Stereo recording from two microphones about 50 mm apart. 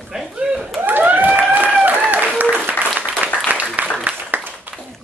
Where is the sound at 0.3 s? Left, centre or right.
Centre.